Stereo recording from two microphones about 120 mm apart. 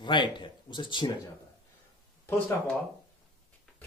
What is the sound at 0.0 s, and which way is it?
Speech, 40° left (ahead or behind).